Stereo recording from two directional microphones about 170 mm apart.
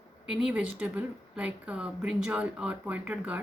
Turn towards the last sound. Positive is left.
turn(degrees=-10)  # may be behind; listen again after turning